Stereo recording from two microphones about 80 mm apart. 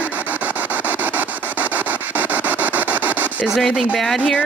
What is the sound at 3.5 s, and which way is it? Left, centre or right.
Speech, centre.